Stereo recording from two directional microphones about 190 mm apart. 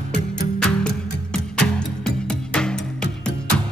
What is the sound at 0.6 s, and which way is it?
Music, 5° left (ahead or behind).